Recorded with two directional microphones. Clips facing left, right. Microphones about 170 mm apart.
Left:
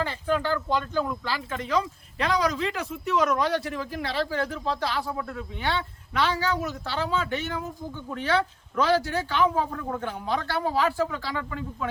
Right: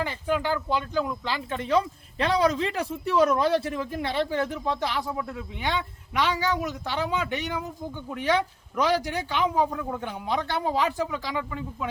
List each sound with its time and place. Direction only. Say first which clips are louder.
0.0 s speech: even; 15° right (ahead or behind)